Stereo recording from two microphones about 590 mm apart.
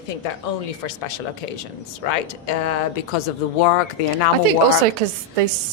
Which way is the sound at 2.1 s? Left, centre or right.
Left.